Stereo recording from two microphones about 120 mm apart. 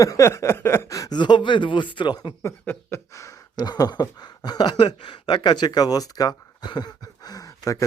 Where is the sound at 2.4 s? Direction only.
20° left (ahead or behind).